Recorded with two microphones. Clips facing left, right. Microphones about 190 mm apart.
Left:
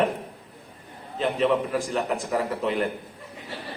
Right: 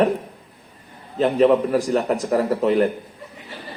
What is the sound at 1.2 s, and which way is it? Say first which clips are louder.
A man's voice: right 7 dB; 40° right (ahead or behind).